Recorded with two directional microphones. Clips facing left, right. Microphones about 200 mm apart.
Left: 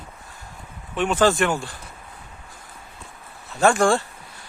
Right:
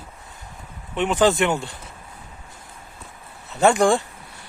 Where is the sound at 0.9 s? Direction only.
20° right (ahead or behind).